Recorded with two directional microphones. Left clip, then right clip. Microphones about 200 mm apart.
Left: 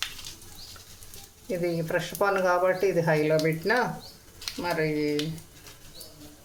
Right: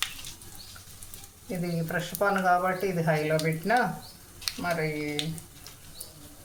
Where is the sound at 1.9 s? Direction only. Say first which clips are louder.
Even; 45° left (ahead or behind).